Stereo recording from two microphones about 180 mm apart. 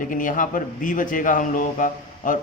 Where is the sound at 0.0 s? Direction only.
50° left (ahead or behind).